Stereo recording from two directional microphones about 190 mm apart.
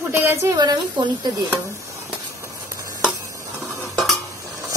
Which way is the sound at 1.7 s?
15° right (ahead or behind).